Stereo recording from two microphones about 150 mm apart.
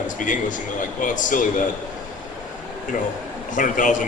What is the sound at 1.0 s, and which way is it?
Speech, 60° left (ahead or behind).